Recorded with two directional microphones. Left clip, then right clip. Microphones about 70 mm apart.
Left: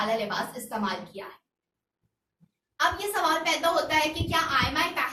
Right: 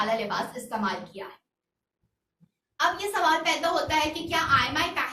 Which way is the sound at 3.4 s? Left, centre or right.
Right.